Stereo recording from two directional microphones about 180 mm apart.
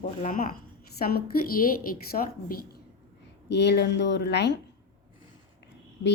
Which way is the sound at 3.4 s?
70° left (ahead or behind).